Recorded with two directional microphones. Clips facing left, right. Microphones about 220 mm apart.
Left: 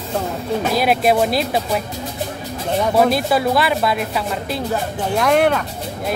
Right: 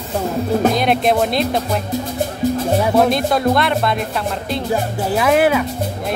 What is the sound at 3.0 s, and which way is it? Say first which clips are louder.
Speech: left 2 dB; 5° left (ahead or behind).